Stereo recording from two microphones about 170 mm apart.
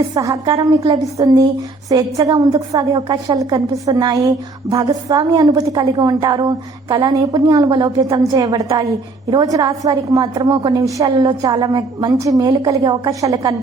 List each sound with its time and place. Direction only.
0.1 s a woman's voice: 20° right (ahead or behind)